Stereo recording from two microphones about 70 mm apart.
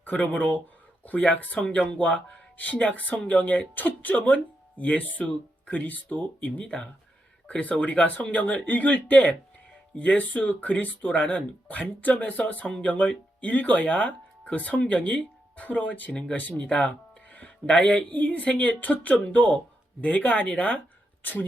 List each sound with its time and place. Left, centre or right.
0.0 s speech: left